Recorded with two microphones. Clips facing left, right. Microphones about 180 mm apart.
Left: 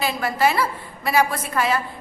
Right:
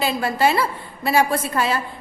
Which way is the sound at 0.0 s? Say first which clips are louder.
Right 1 dB; 25° right (ahead or behind).